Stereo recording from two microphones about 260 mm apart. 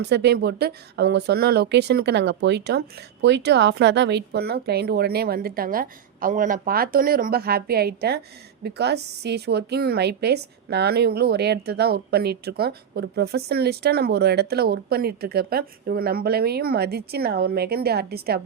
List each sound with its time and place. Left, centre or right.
0.0 s a woman's voice: right